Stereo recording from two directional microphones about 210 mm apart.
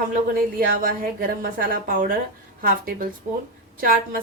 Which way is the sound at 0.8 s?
40° right (ahead or behind).